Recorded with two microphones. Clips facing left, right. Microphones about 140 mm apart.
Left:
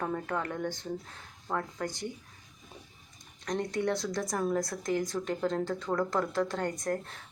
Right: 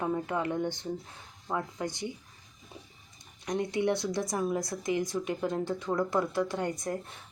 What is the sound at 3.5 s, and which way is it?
A woman's voice, 10° right (ahead or behind).